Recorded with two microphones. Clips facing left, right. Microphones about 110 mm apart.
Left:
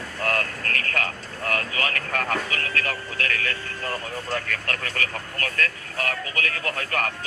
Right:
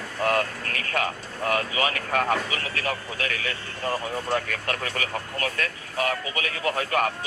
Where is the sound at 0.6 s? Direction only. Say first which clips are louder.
Left 3 dB; 55° left (ahead or behind).